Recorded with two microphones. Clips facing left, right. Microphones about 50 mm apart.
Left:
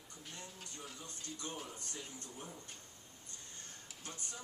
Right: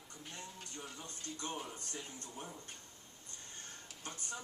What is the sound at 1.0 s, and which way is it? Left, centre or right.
Speech, right.